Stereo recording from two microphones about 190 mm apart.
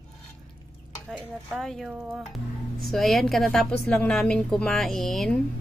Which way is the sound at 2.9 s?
Centre (ahead or behind).